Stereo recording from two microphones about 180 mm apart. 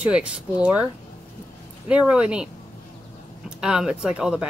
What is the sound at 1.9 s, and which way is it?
A woman's voice, 5° right (ahead or behind).